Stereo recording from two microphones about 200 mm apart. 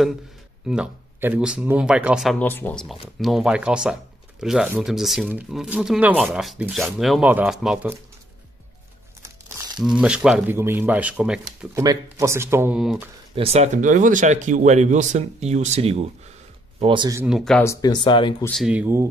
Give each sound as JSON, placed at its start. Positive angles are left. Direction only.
{"t": 0.7, "sound": "speech", "side_deg": -5}
{"t": 2.4, "sound": "speech", "side_deg": 10}
{"t": 9.8, "sound": "speech", "side_deg": -5}
{"t": 11.8, "sound": "speech", "side_deg": -15}
{"t": 13.3, "sound": "speech", "side_deg": -30}
{"t": 17.2, "sound": "speech", "side_deg": -5}
{"t": 17.6, "sound": "speech", "side_deg": 15}
{"t": 18.4, "sound": "speech", "side_deg": 0}